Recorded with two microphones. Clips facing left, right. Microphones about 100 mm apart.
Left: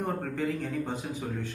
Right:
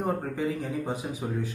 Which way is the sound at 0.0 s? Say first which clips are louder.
Right 2 dB; 15° right (ahead or behind).